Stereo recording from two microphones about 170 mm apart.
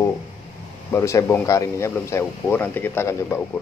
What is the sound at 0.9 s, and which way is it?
Speech, 15° left (ahead or behind).